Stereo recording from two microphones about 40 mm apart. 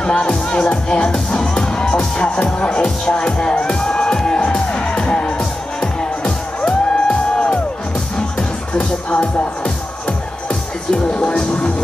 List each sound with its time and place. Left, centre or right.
0.0 s speech: left
3.3 s music: left
4.4 s music: left